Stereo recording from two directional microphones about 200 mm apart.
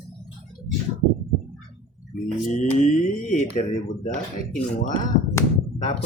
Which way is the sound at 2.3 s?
35° left (ahead or behind).